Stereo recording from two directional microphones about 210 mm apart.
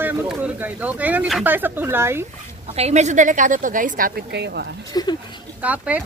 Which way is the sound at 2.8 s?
30° right (ahead or behind).